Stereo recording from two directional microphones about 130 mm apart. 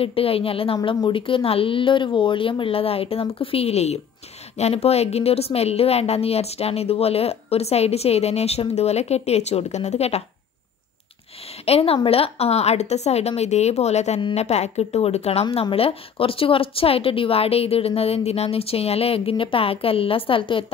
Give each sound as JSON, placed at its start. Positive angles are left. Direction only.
{"t": 0.0, "sound": "a woman's voice", "side_deg": 45}
{"t": 11.6, "sound": "a woman's voice", "side_deg": 50}